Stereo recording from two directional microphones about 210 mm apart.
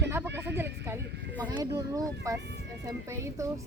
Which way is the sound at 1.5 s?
15° right (ahead or behind).